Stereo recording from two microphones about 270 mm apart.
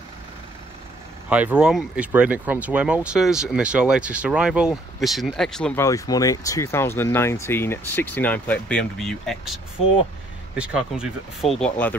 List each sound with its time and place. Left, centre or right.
1.3 s speech: centre
10.6 s speech: centre
11.4 s speech: left